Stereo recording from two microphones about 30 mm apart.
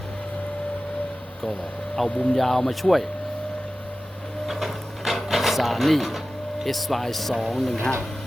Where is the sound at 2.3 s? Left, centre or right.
Centre.